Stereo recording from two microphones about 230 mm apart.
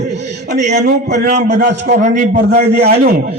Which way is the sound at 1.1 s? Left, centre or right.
Right.